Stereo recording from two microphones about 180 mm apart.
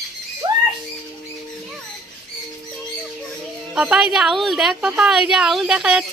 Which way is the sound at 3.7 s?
5° right (ahead or behind).